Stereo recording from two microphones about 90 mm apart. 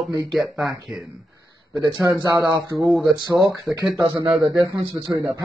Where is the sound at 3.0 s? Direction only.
Centre (ahead or behind).